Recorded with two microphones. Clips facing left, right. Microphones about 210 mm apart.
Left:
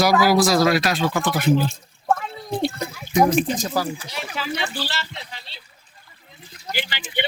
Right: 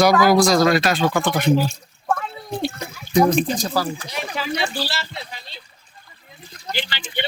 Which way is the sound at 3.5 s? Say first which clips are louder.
Right 1 dB; 35° right (ahead or behind).